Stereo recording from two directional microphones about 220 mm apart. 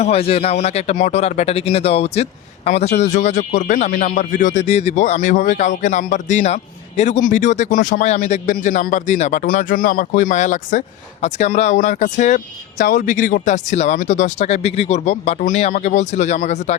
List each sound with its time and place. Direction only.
0.0 s speech: 25° left (ahead or behind)